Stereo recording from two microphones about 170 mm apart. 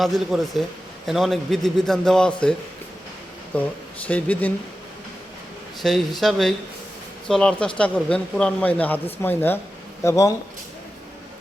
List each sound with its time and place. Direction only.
0.0 s a man's voice: centre (ahead or behind)
5.8 s a man's voice: centre (ahead or behind); by 10.3 s 15° left (ahead or behind)